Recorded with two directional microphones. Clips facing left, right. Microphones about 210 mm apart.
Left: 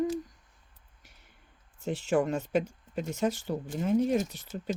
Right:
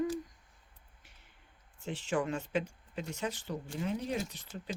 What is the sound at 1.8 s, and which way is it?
Speech, 40° left (ahead or behind).